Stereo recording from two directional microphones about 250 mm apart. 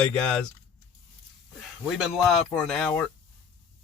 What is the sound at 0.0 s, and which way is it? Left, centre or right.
Speech, centre.